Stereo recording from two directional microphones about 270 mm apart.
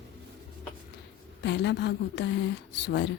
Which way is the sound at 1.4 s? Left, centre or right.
Left.